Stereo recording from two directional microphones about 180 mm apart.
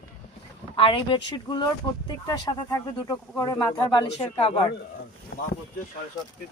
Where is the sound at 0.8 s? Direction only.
30° left (ahead or behind).